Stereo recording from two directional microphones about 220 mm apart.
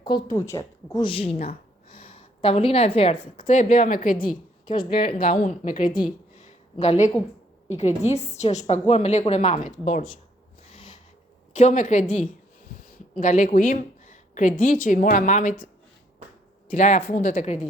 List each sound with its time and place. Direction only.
0.0 s a woman's voice: 20° left (ahead or behind)
1.4 s a sound: 25° left (ahead or behind)
3.3 s a woman's voice: 30° left (ahead or behind)
4.6 s a woman's voice: 20° left (ahead or behind)
5.2 s a woman's voice: 40° left (ahead or behind)
10.7 s a sound: 25° left (ahead or behind)
11.5 s a woman's voice: 35° left (ahead or behind)